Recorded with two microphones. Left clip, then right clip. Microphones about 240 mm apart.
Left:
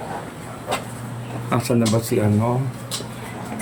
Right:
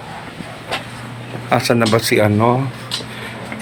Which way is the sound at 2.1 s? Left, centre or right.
Right.